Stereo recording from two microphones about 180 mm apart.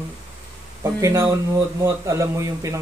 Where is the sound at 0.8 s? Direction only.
15° right (ahead or behind).